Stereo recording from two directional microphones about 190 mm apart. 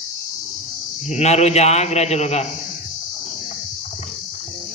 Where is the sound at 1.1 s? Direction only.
35° left (ahead or behind).